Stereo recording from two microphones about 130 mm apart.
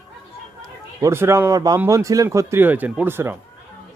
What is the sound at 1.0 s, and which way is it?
Speech, 20° right (ahead or behind).